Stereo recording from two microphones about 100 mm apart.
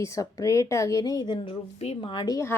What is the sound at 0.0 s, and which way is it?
A woman's voice, 35° left (ahead or behind).